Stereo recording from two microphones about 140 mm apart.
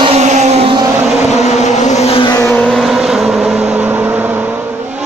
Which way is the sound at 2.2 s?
20° left (ahead or behind).